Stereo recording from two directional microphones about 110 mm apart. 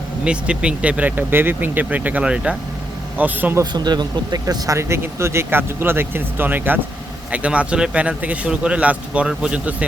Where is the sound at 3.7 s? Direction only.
40° right (ahead or behind).